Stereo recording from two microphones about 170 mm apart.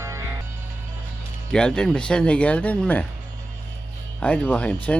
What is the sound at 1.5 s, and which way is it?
Speech, 5° left (ahead or behind).